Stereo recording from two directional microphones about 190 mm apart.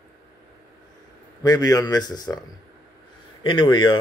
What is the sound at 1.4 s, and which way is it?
Speech, 20° left (ahead or behind).